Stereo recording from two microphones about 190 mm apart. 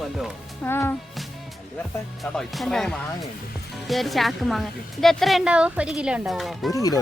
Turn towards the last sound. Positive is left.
turn(degrees=20)  # may be behind; listen again after turning